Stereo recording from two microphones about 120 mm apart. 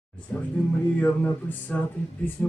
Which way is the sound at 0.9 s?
10° left (ahead or behind).